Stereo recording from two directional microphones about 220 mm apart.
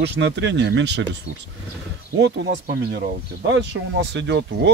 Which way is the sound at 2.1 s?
50° right (ahead or behind).